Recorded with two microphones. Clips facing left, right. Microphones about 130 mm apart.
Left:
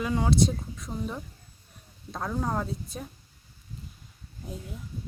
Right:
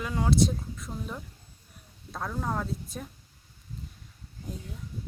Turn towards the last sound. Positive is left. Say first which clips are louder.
# left 1 dB
turn(degrees=5)  # may be behind; listen again after turning